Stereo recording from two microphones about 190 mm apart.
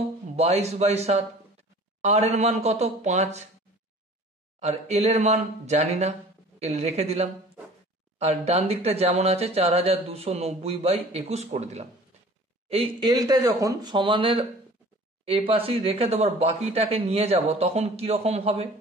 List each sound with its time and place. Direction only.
0.4 s speech: 35° right (ahead or behind)
4.6 s speech: 35° right (ahead or behind)